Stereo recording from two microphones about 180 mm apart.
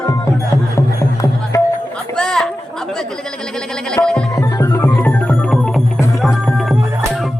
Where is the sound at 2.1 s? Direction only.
5° left (ahead or behind).